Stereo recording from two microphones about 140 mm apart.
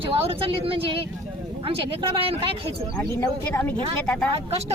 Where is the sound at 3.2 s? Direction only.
15° left (ahead or behind).